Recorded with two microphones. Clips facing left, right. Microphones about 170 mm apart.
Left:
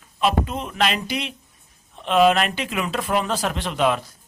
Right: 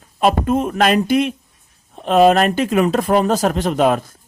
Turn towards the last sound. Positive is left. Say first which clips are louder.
# right 6 dB
turn(degrees=-45)  # may be behind; listen again after turning